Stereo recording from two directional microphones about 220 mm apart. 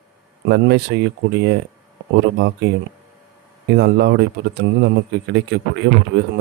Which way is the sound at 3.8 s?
50° right (ahead or behind).